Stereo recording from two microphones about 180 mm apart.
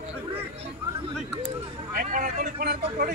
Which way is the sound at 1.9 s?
45° right (ahead or behind).